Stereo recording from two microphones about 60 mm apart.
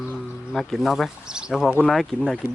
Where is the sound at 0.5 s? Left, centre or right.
Centre.